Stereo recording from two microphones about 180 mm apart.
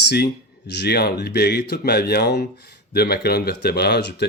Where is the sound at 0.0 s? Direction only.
65° left (ahead or behind).